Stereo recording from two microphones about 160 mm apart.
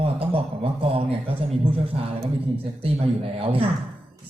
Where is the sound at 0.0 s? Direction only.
35° right (ahead or behind).